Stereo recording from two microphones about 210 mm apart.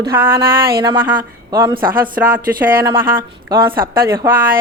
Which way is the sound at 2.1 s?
10° right (ahead or behind).